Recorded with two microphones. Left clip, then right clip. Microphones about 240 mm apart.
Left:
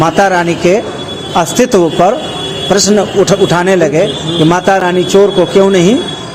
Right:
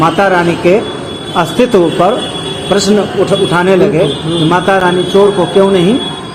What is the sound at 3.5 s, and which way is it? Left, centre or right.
Speech, left.